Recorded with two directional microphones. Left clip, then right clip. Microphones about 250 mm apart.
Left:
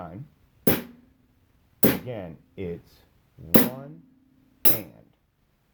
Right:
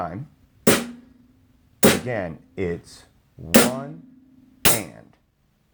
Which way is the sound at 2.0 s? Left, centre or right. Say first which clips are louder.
Right 9 dB; right.